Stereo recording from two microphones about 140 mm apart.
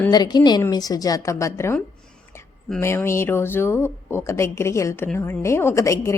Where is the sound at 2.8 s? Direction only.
20° left (ahead or behind).